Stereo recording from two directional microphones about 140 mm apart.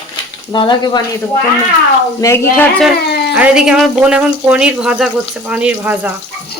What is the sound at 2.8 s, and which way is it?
Speech, 5° right (ahead or behind).